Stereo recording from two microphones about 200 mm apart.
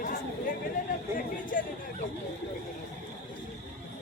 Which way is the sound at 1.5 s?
45° left (ahead or behind).